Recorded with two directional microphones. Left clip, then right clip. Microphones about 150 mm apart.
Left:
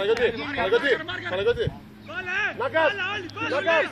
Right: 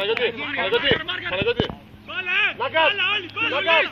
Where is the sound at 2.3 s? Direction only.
75° left (ahead or behind).